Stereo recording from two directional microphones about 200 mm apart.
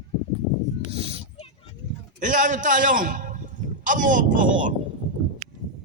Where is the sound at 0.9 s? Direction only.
30° right (ahead or behind).